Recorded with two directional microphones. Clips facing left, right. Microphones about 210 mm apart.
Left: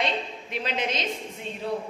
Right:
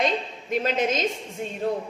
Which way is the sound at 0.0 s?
45° right (ahead or behind).